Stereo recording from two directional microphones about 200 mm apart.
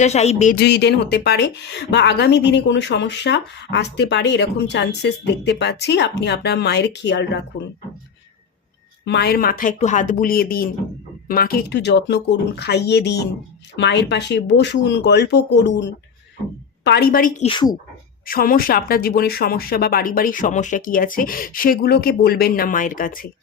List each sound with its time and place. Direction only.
0.0 s speech: 35° left (ahead or behind)
0.5 s speech: 55° left (ahead or behind)
9.0 s speech: 55° left (ahead or behind); by 17.5 s 40° left (ahead or behind)
17.5 s speech: 20° left (ahead or behind)
18.3 s speech: 45° left (ahead or behind)